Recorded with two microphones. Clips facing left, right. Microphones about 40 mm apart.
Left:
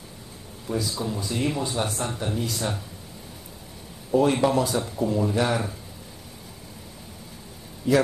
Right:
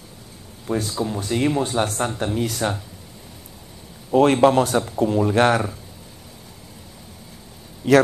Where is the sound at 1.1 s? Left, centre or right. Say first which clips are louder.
Right 7 dB; right.